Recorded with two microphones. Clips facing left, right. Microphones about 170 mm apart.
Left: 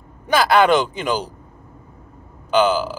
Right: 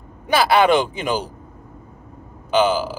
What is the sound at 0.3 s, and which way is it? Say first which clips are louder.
Speech: even; 10° right (ahead or behind).